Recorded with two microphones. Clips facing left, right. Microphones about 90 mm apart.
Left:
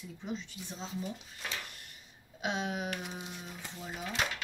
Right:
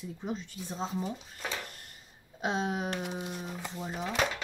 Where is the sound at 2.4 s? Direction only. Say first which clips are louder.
Right 3 dB; 35° right (ahead or behind).